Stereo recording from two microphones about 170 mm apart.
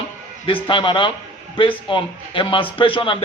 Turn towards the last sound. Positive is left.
turn(degrees=30)  # may be behind; listen again after turning